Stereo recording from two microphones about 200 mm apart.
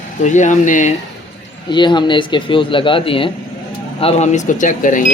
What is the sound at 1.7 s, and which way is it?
Speech, 25° left (ahead or behind).